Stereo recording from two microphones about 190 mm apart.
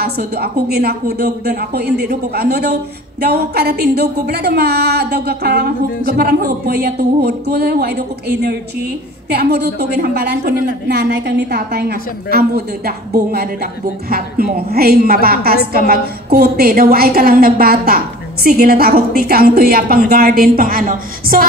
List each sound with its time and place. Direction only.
0.0 s a woman's voice: 55° right (ahead or behind)